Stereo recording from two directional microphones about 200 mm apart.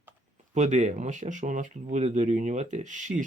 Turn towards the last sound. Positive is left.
turn(degrees=-40)  # may be behind; listen again after turning